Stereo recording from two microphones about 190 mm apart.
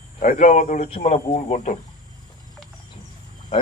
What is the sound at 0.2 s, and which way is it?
Speech, 40° left (ahead or behind).